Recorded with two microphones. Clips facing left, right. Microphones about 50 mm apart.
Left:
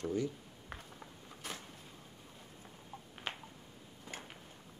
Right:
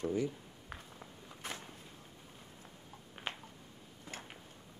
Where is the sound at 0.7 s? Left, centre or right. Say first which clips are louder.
Even; centre.